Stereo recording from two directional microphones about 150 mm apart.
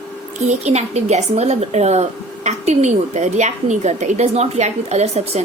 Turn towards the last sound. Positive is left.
turn(degrees=-45)  # may be behind; listen again after turning